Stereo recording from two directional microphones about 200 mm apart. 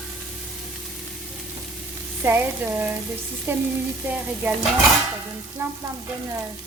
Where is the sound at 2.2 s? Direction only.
10° right (ahead or behind).